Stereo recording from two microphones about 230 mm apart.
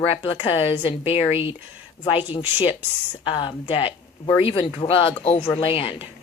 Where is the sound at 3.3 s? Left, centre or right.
Left.